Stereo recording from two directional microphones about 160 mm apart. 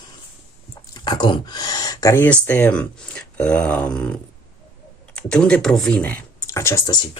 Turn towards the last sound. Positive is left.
turn(degrees=25)  # may be behind; listen again after turning